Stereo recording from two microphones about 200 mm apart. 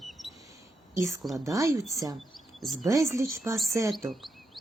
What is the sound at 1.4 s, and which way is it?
Speech, 15° right (ahead or behind).